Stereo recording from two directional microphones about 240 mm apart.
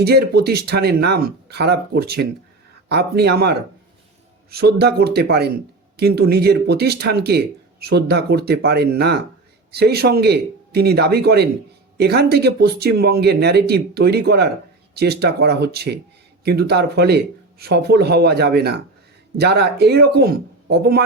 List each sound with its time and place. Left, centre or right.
0.0 s speech: right
4.5 s speech: right